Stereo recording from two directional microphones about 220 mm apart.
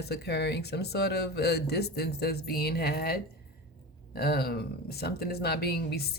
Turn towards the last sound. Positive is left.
turn(degrees=45)  # may be behind; listen again after turning